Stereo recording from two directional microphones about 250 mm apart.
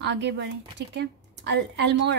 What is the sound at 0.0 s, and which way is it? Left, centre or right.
A woman's voice, right.